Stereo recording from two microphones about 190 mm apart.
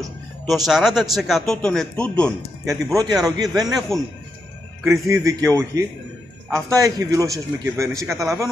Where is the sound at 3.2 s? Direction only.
20° right (ahead or behind).